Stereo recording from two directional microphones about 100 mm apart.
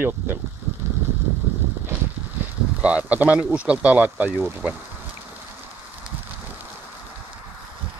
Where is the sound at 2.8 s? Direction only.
15° right (ahead or behind).